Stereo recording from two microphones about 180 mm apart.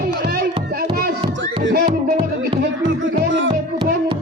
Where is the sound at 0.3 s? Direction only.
60° right (ahead or behind).